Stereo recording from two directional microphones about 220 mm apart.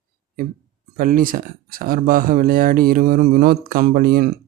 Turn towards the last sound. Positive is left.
turn(degrees=-40)  # may be behind; listen again after turning